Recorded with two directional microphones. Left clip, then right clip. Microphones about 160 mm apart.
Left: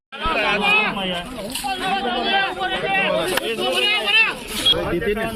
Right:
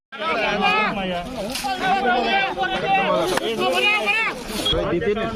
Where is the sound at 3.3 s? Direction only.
45° right (ahead or behind).